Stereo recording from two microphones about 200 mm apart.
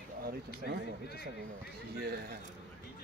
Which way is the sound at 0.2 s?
50° right (ahead or behind).